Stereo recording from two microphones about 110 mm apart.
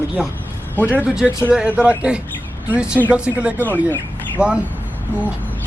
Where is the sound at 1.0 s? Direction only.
10° right (ahead or behind).